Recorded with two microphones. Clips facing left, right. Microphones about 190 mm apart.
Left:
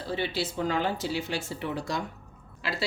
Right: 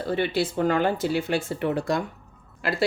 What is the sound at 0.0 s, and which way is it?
A woman's voice, 55° right (ahead or behind).